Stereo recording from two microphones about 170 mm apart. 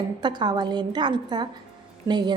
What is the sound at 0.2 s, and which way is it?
A woman's voice, 25° right (ahead or behind).